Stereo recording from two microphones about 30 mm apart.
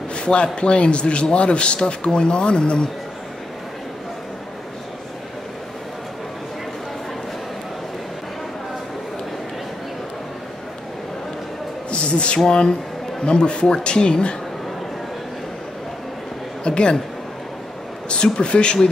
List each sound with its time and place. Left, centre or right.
0.1 s speech: left
11.9 s a sound: left
12.4 s speech: left
16.6 s speech: left
18.1 s speech: left